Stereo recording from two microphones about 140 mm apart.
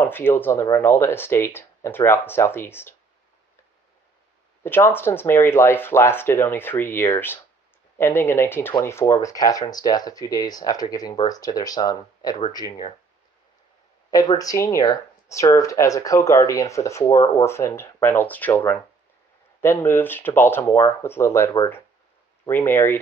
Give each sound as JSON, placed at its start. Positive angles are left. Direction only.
{"t": 0.0, "sound": "speech", "side_deg": 15}
{"t": 4.6, "sound": "speech", "side_deg": 15}
{"t": 14.4, "sound": "speech", "side_deg": 20}